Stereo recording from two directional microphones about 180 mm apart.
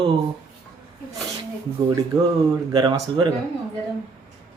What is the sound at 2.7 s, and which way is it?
Speech, 25° right (ahead or behind).